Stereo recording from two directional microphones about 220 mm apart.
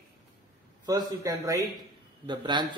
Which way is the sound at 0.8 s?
15° right (ahead or behind).